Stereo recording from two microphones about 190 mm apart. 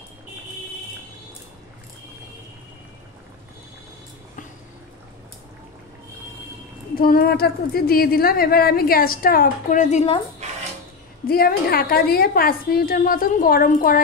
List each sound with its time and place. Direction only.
7.0 s a woman's voice: 50° left (ahead or behind); by 10.2 s 35° left (ahead or behind)
11.2 s a woman's voice: 50° left (ahead or behind)